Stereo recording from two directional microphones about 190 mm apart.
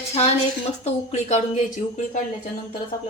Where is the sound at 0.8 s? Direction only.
35° left (ahead or behind).